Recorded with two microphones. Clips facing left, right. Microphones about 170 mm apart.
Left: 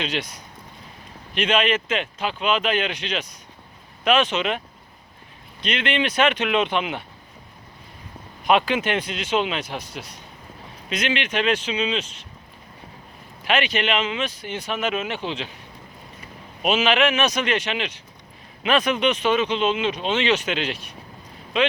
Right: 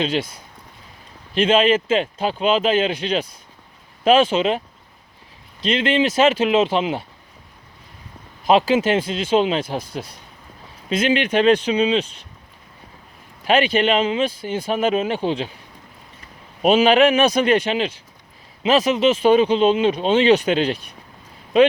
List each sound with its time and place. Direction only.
1.4 s speech: 30° right (ahead or behind)
5.6 s speech: 25° right (ahead or behind)
8.4 s speech: 30° right (ahead or behind)
10.8 s speech: 35° right (ahead or behind)
13.5 s speech: 30° right (ahead or behind)
16.6 s speech: 35° right (ahead or behind)